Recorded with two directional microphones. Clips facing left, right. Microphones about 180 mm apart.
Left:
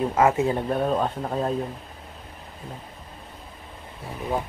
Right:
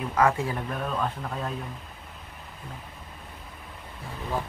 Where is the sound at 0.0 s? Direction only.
25° left (ahead or behind).